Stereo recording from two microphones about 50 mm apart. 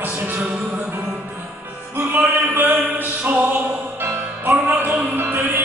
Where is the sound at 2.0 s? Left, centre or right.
Right.